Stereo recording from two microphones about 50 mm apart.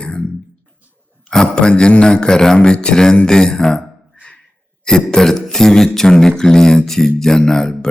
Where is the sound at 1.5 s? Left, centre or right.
Centre.